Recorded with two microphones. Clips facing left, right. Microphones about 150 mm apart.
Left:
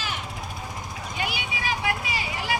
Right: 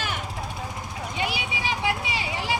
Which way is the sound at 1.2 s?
30° right (ahead or behind).